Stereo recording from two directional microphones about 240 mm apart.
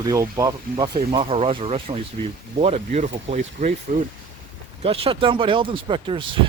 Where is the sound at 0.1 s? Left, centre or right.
Centre; by 3.8 s right.